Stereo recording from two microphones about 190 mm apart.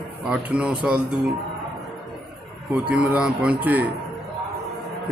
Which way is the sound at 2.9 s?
5° right (ahead or behind).